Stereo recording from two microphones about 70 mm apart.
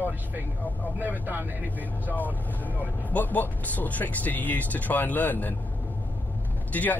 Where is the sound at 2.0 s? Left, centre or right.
Left.